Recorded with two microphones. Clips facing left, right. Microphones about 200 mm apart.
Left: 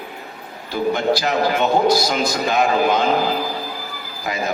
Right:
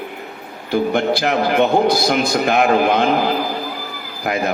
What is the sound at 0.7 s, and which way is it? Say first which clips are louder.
Speech: right 2 dB; 55° right (ahead or behind).